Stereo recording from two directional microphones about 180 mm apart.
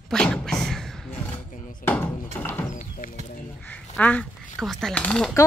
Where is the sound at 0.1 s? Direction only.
5° left (ahead or behind).